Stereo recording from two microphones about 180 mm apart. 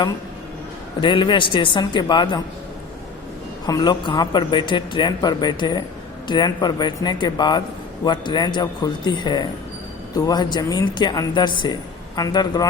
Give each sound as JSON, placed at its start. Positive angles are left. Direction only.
{"t": 1.0, "sound": "speech", "side_deg": 25}
{"t": 3.7, "sound": "speech", "side_deg": 20}